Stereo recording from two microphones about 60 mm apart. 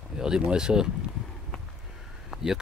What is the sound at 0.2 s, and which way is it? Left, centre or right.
Speech, centre.